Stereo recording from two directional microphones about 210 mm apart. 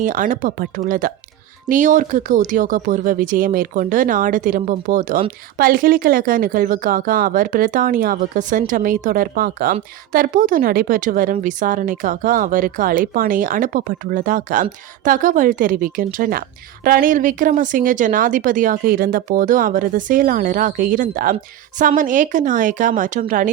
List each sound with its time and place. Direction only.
0.0 s a woman's voice: 40° right (ahead or behind)